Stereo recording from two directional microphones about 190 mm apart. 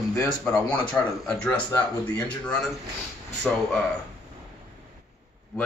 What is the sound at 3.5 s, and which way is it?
Speech, 5° left (ahead or behind).